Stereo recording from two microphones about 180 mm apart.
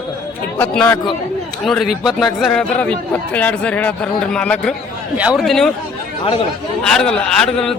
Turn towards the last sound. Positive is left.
turn(degrees=5)  # may be behind; listen again after turning